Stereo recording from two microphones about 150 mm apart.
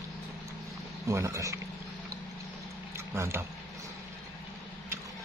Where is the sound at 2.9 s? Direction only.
15° right (ahead or behind).